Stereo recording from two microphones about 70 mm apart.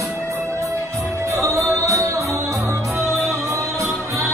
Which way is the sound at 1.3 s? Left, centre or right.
Right.